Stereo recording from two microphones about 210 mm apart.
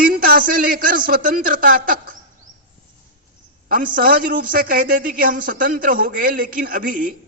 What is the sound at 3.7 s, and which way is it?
A man's voice, 40° right (ahead or behind).